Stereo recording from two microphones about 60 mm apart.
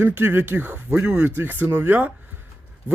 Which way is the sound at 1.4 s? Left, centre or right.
Right.